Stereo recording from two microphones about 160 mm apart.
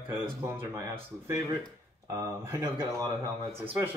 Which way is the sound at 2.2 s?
20° right (ahead or behind).